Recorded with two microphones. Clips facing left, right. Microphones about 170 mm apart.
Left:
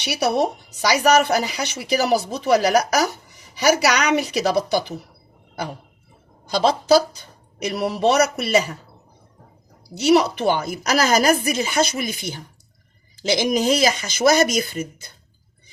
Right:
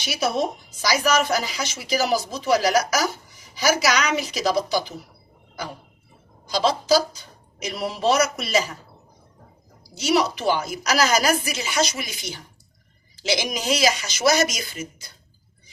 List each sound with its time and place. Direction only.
0.0 s a woman's voice: 65° left (ahead or behind)
6.5 s a woman's voice: 55° left (ahead or behind)
9.9 s a woman's voice: 60° left (ahead or behind)